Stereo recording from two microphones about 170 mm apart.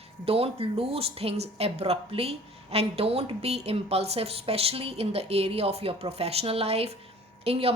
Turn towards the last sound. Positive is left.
turn(degrees=-35)  # may be behind; listen again after turning